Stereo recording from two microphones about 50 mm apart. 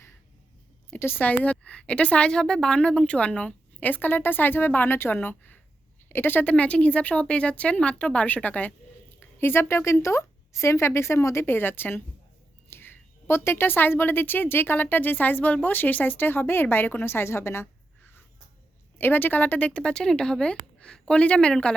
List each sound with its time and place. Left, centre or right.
0.9 s speech: left
1.2 s a woman's voice: left
6.4 s a woman's voice: left
9.2 s a woman's voice: left
11.4 s a woman's voice: left
18.9 s a woman's voice: left; by 21.8 s centre